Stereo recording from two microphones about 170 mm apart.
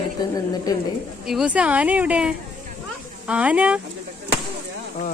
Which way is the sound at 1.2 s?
5° right (ahead or behind).